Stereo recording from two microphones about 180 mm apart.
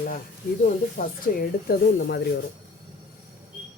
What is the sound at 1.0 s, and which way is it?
Speech, 55° left (ahead or behind).